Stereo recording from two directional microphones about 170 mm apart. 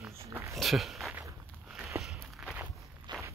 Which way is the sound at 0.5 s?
Centre (ahead or behind).